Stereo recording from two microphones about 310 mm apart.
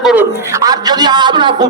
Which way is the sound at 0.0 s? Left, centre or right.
Centre.